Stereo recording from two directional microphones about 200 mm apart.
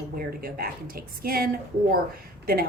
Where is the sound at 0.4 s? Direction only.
50° right (ahead or behind).